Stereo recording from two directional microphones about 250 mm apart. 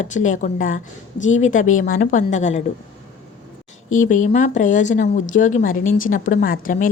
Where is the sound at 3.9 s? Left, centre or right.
Left.